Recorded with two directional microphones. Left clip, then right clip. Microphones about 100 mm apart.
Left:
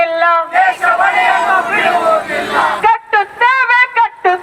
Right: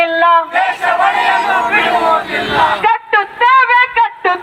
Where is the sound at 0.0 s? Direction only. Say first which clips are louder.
Right 1 dB; 50° left (ahead or behind).